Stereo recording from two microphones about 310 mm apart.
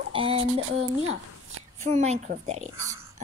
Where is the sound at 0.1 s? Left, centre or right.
Centre.